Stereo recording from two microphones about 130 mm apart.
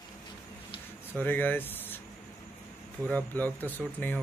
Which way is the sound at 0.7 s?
40° left (ahead or behind).